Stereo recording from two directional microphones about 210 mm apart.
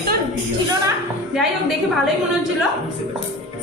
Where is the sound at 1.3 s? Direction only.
Centre (ahead or behind).